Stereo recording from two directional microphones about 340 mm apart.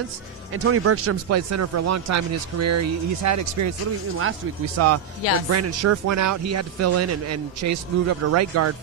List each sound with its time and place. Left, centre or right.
0.5 s speech: right
4.2 s speech: right